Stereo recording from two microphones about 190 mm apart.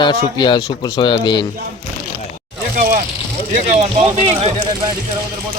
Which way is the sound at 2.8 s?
45° right (ahead or behind).